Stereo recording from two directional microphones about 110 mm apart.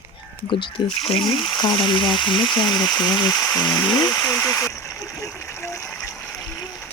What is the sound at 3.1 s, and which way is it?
Speech, 35° left (ahead or behind).